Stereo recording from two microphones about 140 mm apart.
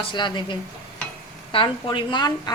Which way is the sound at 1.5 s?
35° left (ahead or behind).